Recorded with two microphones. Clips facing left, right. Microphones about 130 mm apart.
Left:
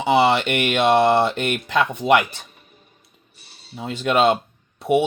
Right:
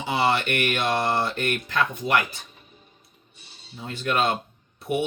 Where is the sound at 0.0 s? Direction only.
80° left.